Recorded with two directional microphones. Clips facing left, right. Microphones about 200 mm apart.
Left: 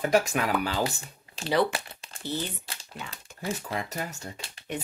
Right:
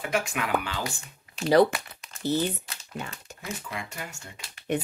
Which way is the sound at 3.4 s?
35° left (ahead or behind).